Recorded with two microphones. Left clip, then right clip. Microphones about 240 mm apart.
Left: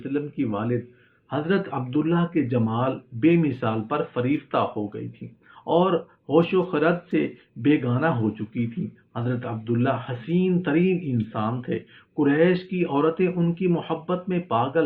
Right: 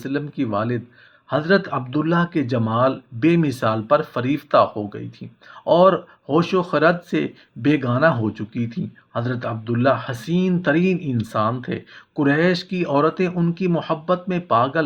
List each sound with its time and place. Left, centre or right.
0.0 s speech: right
9.1 s speech: right